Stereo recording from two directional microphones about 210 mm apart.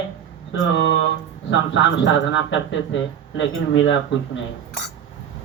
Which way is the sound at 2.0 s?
60° left (ahead or behind).